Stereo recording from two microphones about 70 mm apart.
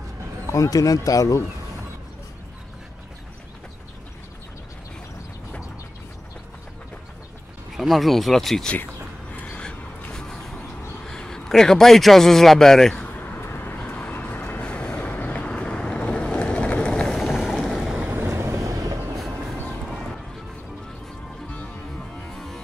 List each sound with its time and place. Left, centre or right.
0.5 s a man's voice: left
7.7 s speech: centre
9.3 s a sound: left
11.1 s a man's voice: centre
13.4 s vehicle: left; by 17.2 s centre
17.2 s boat: centre
18.0 s vehicle: right
18.3 s vehicle: right